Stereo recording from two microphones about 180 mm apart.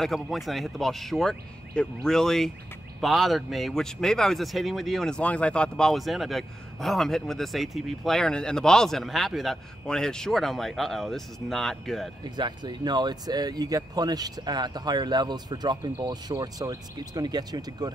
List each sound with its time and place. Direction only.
0.0 s speech: centre (ahead or behind)
12.4 s speech: 25° right (ahead or behind)